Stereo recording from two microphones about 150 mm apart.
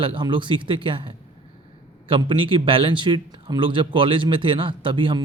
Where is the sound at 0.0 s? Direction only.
35° right (ahead or behind).